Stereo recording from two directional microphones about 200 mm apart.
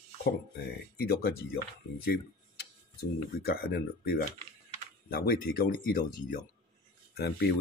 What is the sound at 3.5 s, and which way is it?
Speech, 50° left (ahead or behind).